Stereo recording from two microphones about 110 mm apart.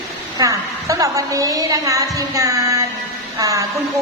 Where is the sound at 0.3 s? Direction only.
30° right (ahead or behind).